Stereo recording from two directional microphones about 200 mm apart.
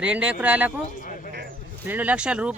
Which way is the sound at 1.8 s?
10° right (ahead or behind).